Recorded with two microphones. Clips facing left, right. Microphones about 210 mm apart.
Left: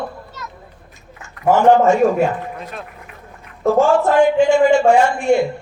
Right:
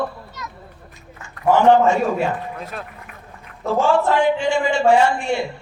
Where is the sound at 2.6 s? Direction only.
Centre (ahead or behind).